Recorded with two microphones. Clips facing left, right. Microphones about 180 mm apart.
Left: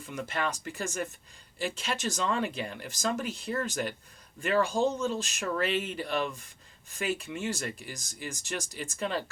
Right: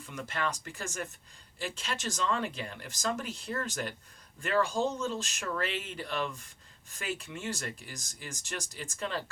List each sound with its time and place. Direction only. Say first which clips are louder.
0.3 s speech: left 2 dB; 15° left (ahead or behind)